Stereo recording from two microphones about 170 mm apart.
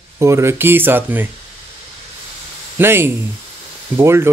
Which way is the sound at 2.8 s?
15° right (ahead or behind).